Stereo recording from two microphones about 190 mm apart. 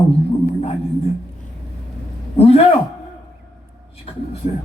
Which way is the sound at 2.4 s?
30° left (ahead or behind).